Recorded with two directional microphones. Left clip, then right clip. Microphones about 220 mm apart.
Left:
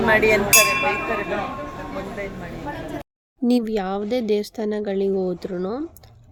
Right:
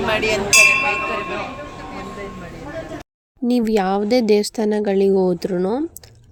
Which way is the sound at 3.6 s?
25° right (ahead or behind).